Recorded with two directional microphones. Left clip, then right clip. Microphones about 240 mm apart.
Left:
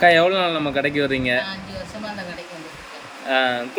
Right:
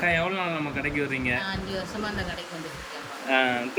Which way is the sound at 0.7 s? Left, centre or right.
Left.